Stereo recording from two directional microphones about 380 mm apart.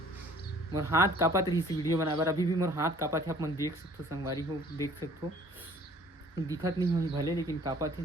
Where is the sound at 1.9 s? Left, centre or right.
Centre.